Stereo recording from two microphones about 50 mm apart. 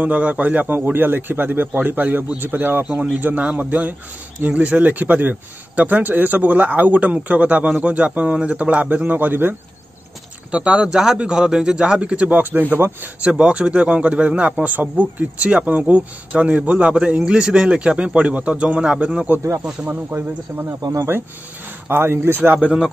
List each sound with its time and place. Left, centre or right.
0.0 s a man's voice: right
0.8 s a man's voice: right
10.5 s speech: right
10.9 s a man's voice: centre; by 13.1 s right
13.2 s speech: right
14.6 s speech: right; by 19.2 s centre
20.2 s a man's voice: right
21.8 s a man's voice: right
22.4 s a man's voice: right